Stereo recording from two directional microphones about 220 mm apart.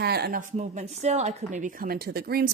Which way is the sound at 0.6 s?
30° right (ahead or behind).